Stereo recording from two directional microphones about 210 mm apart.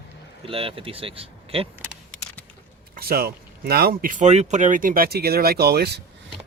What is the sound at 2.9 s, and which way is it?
Speech, 45° right (ahead or behind).